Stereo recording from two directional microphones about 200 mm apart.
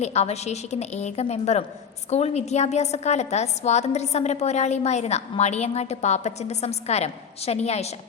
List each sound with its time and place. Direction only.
0.0 s a woman's voice: 35° left (ahead or behind)